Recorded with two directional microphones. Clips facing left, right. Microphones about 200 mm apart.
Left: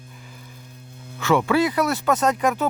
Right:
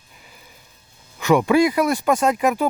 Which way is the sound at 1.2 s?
15° right (ahead or behind).